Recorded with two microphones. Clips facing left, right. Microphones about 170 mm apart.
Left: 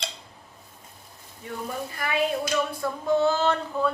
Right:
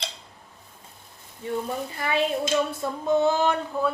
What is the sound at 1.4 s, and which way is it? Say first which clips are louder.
A woman's voice: right 4 dB; 25° right (ahead or behind).